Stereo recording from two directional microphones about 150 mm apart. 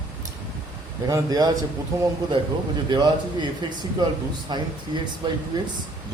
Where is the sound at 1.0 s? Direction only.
25° right (ahead or behind).